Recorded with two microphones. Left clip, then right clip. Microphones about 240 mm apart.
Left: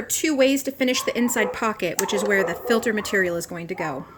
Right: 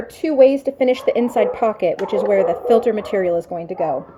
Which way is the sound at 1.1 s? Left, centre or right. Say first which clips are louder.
Right 6 dB; left.